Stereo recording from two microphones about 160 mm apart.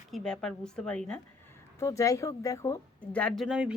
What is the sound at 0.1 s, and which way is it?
Speech, 5° left (ahead or behind).